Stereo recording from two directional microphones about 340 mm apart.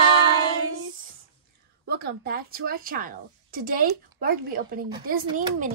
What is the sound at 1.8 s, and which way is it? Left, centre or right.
A woman's voice, right.